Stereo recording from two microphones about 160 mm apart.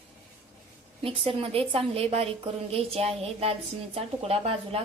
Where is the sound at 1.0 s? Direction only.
35° right (ahead or behind).